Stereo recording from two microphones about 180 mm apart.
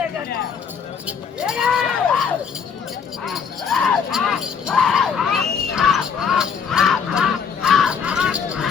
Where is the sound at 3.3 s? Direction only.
Centre (ahead or behind).